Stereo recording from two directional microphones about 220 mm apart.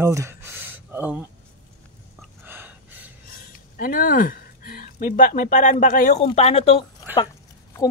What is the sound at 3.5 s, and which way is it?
A woman's voice, 40° left (ahead or behind).